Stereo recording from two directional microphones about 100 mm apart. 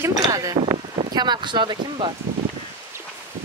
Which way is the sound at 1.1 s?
50° right (ahead or behind).